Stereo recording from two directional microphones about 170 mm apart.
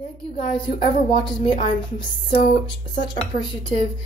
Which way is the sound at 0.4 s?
30° left (ahead or behind).